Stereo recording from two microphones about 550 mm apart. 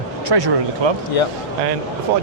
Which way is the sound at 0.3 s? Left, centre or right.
Right.